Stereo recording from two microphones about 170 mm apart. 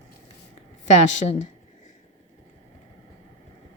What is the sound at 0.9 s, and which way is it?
Speech, 45° left (ahead or behind).